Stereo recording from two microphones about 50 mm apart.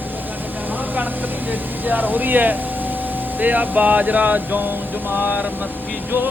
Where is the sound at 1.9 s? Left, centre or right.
Right.